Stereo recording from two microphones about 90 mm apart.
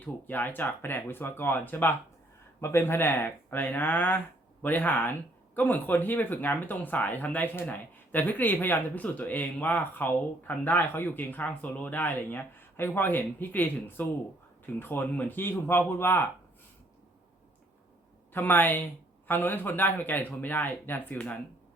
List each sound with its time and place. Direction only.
0.0 s speech: 20° left (ahead or behind)
18.3 s speech: 20° left (ahead or behind)